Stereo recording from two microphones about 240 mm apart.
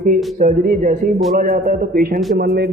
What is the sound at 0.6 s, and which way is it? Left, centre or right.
A man's voice, right.